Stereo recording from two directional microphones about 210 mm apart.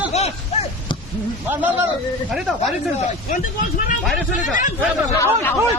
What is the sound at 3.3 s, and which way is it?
Speech, 40° left (ahead or behind).